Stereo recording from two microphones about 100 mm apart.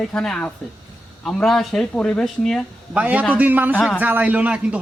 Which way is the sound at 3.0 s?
15° right (ahead or behind).